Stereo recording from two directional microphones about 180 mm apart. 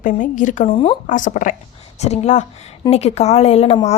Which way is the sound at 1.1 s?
45° left (ahead or behind).